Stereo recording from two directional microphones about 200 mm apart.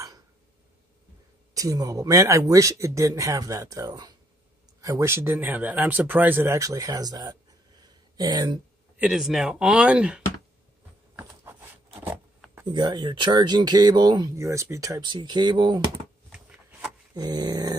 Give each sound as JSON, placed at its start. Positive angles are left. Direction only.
{"t": 1.5, "sound": "speech", "side_deg": -15}
{"t": 8.9, "sound": "speech", "side_deg": -5}
{"t": 11.1, "sound": "a sound", "side_deg": -10}
{"t": 12.7, "sound": "speech", "side_deg": -20}
{"t": 16.3, "sound": "a sound", "side_deg": -5}
{"t": 17.1, "sound": "speech", "side_deg": -20}